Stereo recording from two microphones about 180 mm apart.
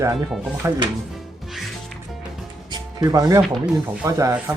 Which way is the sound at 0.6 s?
15° right (ahead or behind).